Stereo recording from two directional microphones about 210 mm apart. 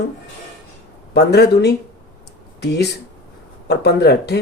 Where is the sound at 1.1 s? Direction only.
50° left (ahead or behind).